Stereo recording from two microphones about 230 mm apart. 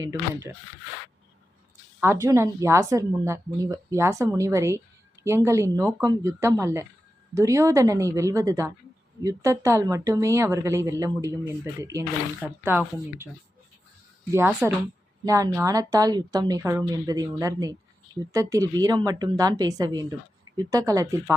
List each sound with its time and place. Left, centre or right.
0.0 s speech: centre
2.0 s speech: centre
14.3 s speech: centre